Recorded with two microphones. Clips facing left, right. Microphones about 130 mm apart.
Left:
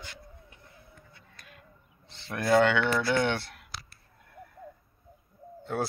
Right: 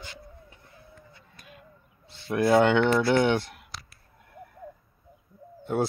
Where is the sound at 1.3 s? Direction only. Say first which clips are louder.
Right 4 dB; 10° right (ahead or behind).